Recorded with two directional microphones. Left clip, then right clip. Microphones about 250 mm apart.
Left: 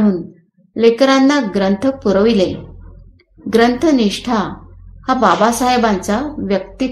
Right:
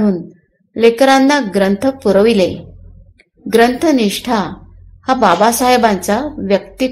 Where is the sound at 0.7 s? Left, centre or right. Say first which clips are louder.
Right 2 dB; right.